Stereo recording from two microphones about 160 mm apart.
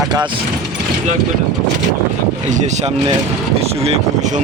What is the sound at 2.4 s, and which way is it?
Speech, 50° right (ahead or behind).